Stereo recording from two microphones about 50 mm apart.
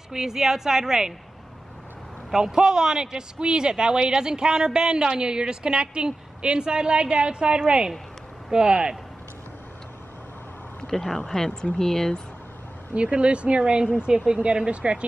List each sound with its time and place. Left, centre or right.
0.1 s speech: centre
2.3 s speech: centre
10.8 s speech: centre
12.9 s speech: right